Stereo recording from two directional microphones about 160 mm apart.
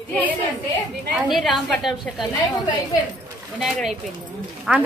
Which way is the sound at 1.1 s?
Centre (ahead or behind).